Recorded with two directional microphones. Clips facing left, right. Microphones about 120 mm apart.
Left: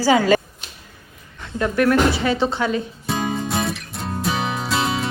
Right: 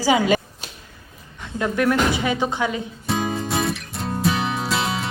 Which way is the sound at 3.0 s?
Centre (ahead or behind).